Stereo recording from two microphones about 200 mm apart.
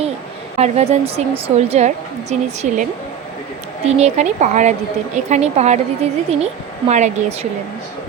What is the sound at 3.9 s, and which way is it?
Speech, 35° right (ahead or behind).